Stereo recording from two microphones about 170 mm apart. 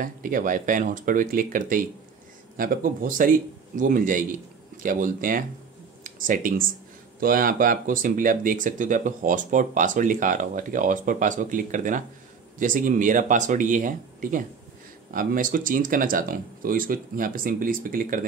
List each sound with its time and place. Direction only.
0.0 s speech: 50° right (ahead or behind)